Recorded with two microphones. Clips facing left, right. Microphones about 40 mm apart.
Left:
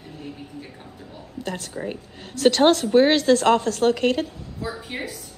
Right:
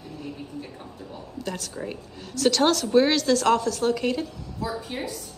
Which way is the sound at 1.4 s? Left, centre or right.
Left.